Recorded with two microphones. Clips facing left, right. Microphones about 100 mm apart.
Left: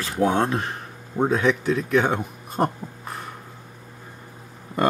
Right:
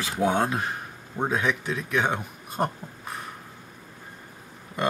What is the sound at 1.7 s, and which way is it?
Speech, 35° left (ahead or behind).